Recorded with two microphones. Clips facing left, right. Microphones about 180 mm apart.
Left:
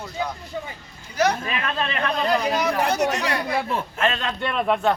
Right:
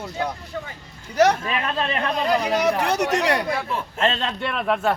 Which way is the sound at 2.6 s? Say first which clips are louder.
Right 1 dB; 75° right (ahead or behind).